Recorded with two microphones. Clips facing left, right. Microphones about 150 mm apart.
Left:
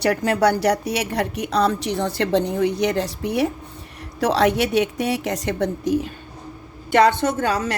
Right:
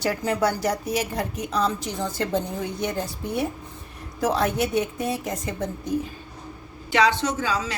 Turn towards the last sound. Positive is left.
turn(degrees=60)  # may be behind; listen again after turning